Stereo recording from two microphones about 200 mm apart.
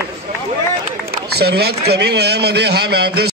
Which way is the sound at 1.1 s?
55° right (ahead or behind).